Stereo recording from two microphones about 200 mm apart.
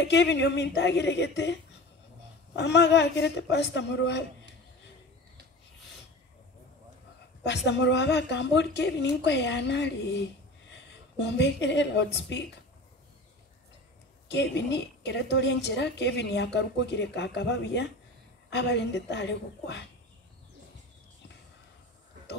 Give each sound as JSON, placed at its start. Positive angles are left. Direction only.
{"t": 0.0, "sound": "a woman's voice", "side_deg": 60}
{"t": 7.4, "sound": "a woman's voice", "side_deg": 60}
{"t": 14.3, "sound": "a woman's voice", "side_deg": 60}